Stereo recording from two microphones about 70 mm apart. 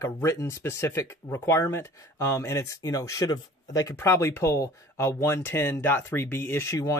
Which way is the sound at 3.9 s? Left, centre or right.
Left.